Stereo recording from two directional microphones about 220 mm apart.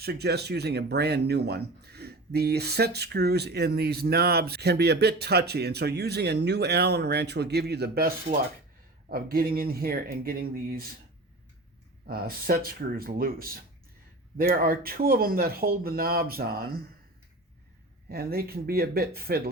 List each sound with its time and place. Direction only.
0.0 s speech: 45° right (ahead or behind)
12.0 s speech: 40° right (ahead or behind)
18.1 s speech: 45° right (ahead or behind)